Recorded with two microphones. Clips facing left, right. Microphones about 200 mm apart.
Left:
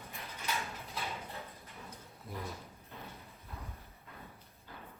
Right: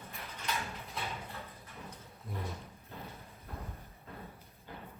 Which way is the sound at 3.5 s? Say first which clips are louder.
Right 4 dB; 50° right (ahead or behind).